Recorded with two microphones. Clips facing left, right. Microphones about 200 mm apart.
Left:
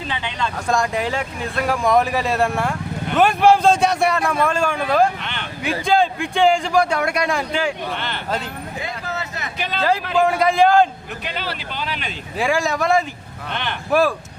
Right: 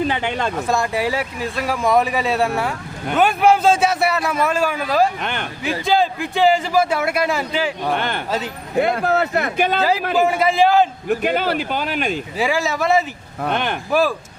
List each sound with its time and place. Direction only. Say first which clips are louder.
0.1 s speech: right 4 dB; 45° right (ahead or behind)
0.7 s speech: left 1 dB; 5° right (ahead or behind)
5.2 s speech: right 5 dB; 50° right (ahead or behind)
5.8 s speech: even; centre (ahead or behind)
7.9 s speech: right 4 dB; 50° right (ahead or behind)
10.2 s speech: left 1 dB; 5° right (ahead or behind)
11.1 s speech: right 10 dB; 50° right (ahead or behind)
12.4 s speech: left 1 dB; centre (ahead or behind)
13.4 s speech: right 7 dB; 50° right (ahead or behind)